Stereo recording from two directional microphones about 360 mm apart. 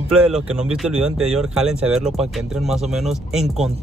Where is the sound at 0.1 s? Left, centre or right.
Centre.